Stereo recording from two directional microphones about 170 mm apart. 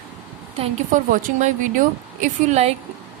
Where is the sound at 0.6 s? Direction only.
45° right (ahead or behind).